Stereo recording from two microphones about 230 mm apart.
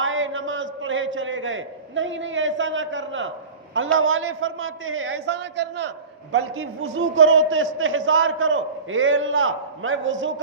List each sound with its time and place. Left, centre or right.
0.0 s a sound: right
3.8 s a man's voice: right
6.3 s a man's voice: right